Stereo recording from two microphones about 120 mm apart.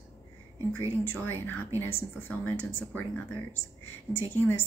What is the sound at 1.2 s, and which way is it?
A woman's voice, 20° left (ahead or behind).